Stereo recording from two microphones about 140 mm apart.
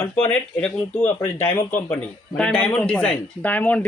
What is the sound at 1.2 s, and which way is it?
Speech, 15° left (ahead or behind).